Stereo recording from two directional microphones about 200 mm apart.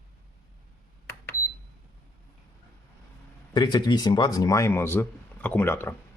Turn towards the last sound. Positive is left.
turn(degrees=10)  # may be behind; listen again after turning